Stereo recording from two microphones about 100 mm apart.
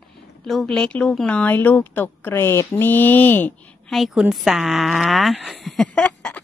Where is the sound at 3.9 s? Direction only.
5° right (ahead or behind).